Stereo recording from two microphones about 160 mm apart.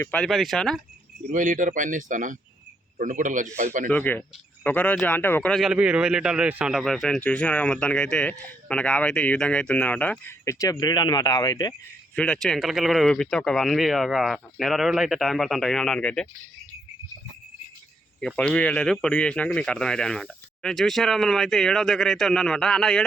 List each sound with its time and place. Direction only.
0.0 s a man's voice: 5° left (ahead or behind)
1.3 s a man's voice: 55° right (ahead or behind)
3.8 s a man's voice: 10° left (ahead or behind)
12.1 s a man's voice: 5° left (ahead or behind)
18.2 s a man's voice: 5° left (ahead or behind)